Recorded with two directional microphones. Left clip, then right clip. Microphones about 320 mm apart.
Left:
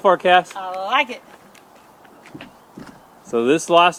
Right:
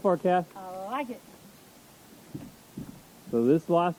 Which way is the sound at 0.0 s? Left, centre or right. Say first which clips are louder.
Left 11 dB; centre.